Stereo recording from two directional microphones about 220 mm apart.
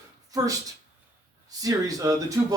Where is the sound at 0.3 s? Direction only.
15° right (ahead or behind).